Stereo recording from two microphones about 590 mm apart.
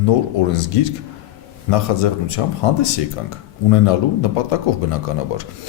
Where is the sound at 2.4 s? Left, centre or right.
Left.